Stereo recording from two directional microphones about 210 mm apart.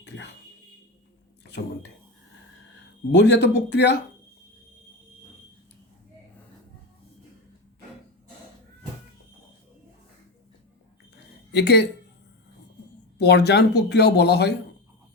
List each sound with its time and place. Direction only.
1.5 s a sound: 55° left (ahead or behind)
3.2 s speech: 55° left (ahead or behind)
11.5 s speech: 55° left (ahead or behind)
13.1 s speech: 50° left (ahead or behind)